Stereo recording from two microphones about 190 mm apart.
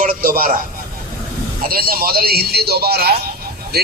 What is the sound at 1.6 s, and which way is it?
A man's voice, 50° right (ahead or behind).